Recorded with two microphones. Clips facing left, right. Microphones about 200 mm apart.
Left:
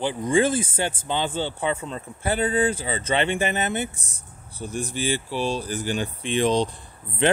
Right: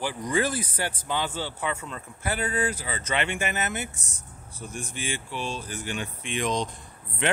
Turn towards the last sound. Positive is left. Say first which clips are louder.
# left 6 dB
turn(degrees=30)  # may be behind; listen again after turning